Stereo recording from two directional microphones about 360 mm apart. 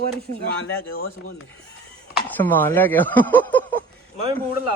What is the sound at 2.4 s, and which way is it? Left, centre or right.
Speech, centre.